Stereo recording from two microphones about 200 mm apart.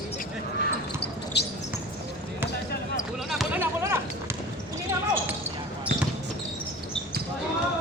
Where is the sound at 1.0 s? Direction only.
55° left (ahead or behind).